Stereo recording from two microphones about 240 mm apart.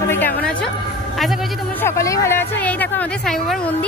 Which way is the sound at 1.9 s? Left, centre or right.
Centre.